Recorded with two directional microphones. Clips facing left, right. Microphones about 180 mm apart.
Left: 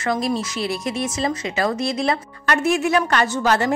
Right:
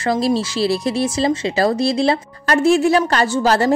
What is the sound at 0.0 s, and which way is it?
Speech, 30° right (ahead or behind).